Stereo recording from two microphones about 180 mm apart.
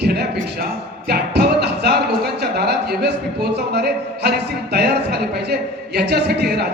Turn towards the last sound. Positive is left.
turn(degrees=-65)  # may be behind; listen again after turning